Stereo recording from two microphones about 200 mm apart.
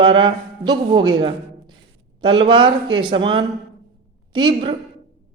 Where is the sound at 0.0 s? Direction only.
25° right (ahead or behind).